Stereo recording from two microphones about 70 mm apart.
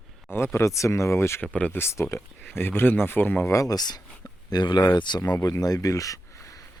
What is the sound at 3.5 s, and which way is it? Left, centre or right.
Speech, left.